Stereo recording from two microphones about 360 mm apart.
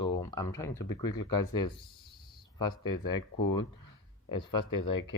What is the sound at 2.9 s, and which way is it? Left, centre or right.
Speech, left.